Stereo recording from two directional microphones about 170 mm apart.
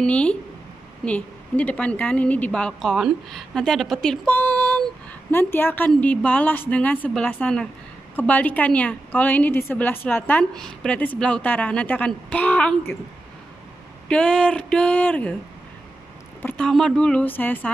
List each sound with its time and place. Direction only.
0.0 s a woman's voice: 5° left (ahead or behind)
14.0 s a woman's voice: 5° left (ahead or behind)
16.4 s a woman's voice: 5° left (ahead or behind)